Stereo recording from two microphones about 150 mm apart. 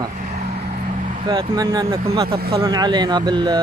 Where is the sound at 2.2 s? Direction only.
90° right.